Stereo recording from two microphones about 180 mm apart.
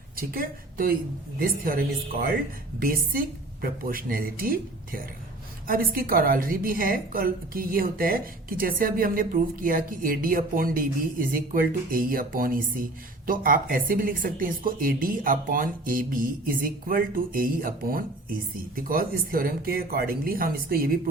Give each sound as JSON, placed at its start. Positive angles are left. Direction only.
{"t": 0.2, "sound": "a woman's voice", "side_deg": -55}